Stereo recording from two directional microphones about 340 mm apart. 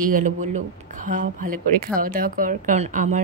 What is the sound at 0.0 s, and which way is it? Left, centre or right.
Speech, right.